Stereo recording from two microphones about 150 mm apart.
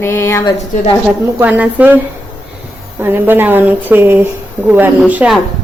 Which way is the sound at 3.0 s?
15° right (ahead or behind).